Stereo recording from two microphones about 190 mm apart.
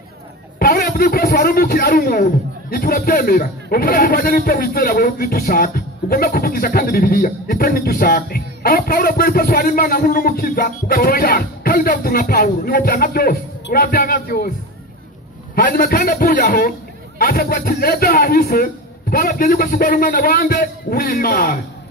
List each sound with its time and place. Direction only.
0.6 s a man's voice: 55° left (ahead or behind)
15.5 s speech: 55° left (ahead or behind)